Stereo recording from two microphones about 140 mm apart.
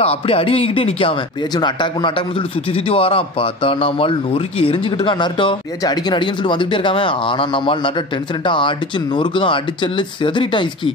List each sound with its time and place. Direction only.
0.0 s speech: 45° left (ahead or behind)
1.5 s a man's voice: 30° left (ahead or behind)